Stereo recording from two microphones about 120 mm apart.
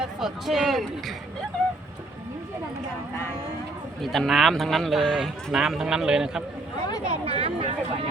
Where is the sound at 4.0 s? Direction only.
Centre (ahead or behind).